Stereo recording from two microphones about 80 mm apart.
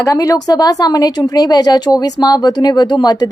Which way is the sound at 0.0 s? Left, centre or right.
Left.